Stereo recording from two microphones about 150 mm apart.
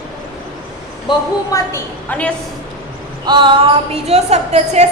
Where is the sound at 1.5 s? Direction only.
15° left (ahead or behind).